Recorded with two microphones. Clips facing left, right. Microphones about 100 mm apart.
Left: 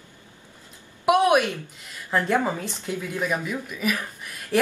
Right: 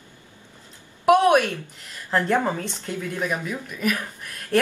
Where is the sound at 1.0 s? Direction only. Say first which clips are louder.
Right 2 dB; 10° left (ahead or behind).